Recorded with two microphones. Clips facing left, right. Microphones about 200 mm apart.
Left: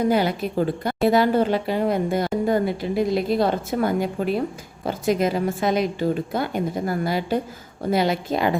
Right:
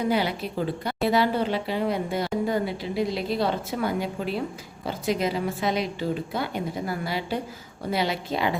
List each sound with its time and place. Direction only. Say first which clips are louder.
0.1 s speech: left 4 dB; 45° left (ahead or behind)